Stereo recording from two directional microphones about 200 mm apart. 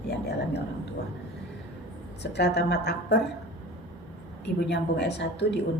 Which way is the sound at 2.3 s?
55° left (ahead or behind).